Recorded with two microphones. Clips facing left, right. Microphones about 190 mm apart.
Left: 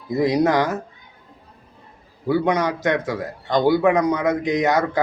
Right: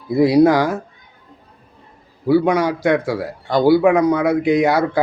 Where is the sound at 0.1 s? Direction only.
10° right (ahead or behind).